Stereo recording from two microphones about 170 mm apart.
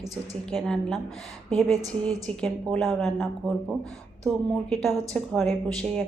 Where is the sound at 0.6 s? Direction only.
5° left (ahead or behind).